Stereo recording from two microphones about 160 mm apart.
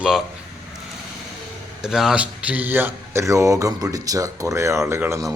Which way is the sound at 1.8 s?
5° right (ahead or behind).